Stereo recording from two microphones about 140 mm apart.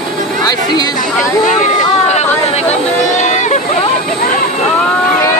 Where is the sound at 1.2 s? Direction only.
60° left (ahead or behind).